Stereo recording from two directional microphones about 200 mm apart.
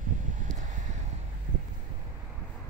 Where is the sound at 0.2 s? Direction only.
40° right (ahead or behind).